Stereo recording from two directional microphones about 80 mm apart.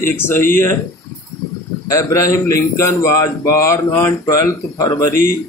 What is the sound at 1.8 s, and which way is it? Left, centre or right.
A man's voice, left.